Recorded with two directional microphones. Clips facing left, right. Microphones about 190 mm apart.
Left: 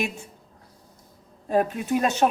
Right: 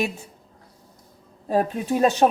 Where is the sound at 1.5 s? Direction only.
35° right (ahead or behind).